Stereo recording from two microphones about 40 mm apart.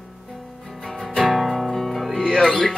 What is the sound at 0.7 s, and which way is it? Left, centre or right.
Music, centre.